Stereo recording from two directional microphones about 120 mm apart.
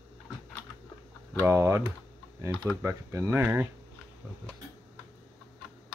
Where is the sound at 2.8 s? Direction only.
25° right (ahead or behind).